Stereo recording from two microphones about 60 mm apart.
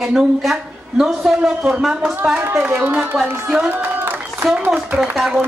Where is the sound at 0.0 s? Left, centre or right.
Centre; by 3.2 s right.